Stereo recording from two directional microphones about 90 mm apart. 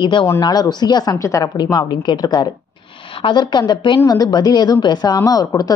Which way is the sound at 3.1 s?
75° left (ahead or behind).